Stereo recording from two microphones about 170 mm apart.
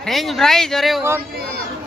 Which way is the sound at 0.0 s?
Centre (ahead or behind).